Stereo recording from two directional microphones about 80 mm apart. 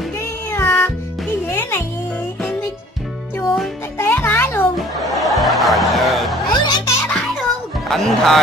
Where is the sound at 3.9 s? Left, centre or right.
Left.